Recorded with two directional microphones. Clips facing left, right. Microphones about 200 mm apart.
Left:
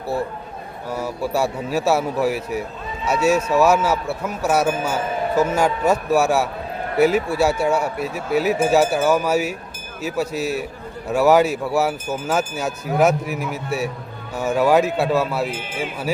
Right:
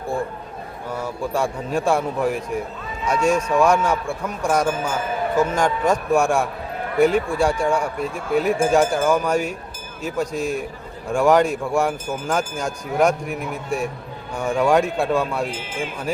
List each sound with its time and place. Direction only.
0.9 s a man's voice: 10° left (ahead or behind)
15.4 s speech: 60° left (ahead or behind)
15.8 s a man's voice: 5° left (ahead or behind)